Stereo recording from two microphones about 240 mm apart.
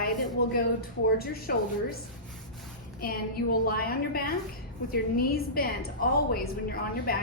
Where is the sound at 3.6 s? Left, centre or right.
Left.